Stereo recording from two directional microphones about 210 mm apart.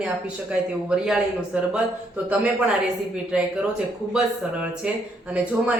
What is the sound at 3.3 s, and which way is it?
Speech, 5° right (ahead or behind).